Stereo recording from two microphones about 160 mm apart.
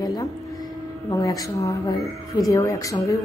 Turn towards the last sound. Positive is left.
turn(degrees=20)  # may be behind; listen again after turning